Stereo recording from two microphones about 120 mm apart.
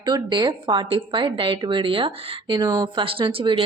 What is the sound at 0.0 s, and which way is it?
A woman's voice, 35° right (ahead or behind).